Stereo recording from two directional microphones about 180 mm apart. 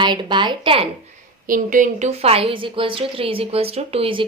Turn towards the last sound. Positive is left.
turn(degrees=-30)  # may be behind; listen again after turning